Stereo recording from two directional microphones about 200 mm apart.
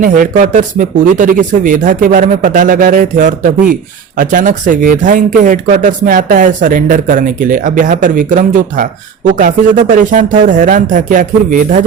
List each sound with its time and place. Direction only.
0.0 s speech: 40° right (ahead or behind)
10.0 s speech: 40° right (ahead or behind)